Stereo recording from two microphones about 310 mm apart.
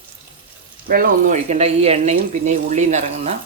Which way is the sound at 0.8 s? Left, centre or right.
Right.